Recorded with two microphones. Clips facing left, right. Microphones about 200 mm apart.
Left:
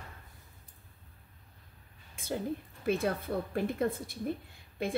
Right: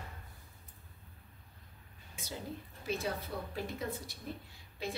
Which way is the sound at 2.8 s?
55° left (ahead or behind).